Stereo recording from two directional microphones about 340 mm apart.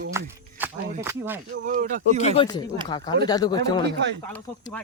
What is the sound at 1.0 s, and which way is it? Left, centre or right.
Speech, centre.